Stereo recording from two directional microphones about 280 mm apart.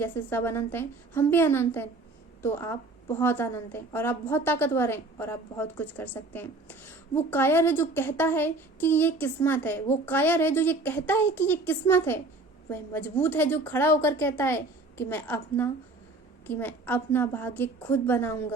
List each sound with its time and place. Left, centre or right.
0.0 s a woman's voice: centre